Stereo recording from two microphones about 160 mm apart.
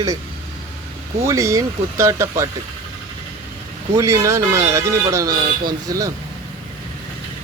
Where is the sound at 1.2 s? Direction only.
20° right (ahead or behind).